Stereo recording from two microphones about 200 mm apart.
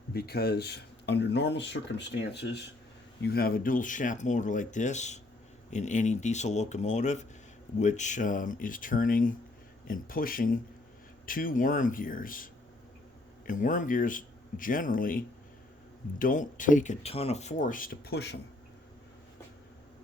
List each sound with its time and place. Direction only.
0.1 s speech: 50° left (ahead or behind)
13.5 s speech: 40° left (ahead or behind)